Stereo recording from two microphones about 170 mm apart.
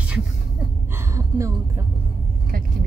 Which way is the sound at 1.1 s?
15° right (ahead or behind).